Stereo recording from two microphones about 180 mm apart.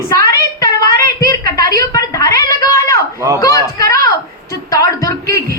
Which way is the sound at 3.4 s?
20° left (ahead or behind).